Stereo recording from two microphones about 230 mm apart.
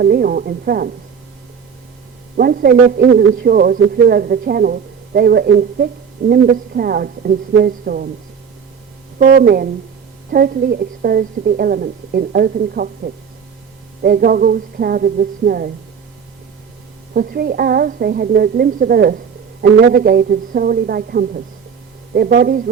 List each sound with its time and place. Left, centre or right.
0.0 s a man's voice: right
2.3 s a man's voice: right
9.1 s a man's voice: right
17.2 s a man's voice: right